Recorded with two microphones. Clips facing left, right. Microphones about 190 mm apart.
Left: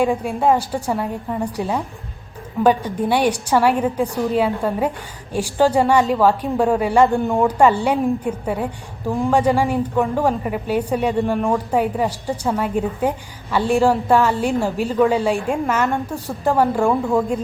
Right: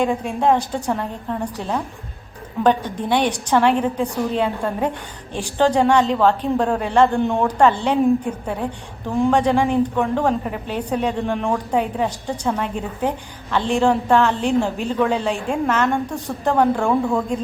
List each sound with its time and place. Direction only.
0.0 s a woman's voice: 5° left (ahead or behind)
9.0 s a woman's voice: 5° left (ahead or behind)